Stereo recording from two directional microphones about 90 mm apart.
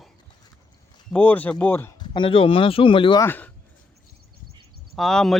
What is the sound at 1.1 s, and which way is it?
Speech, 20° left (ahead or behind).